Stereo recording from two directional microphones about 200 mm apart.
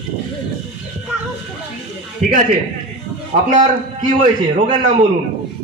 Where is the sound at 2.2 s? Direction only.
40° right (ahead or behind).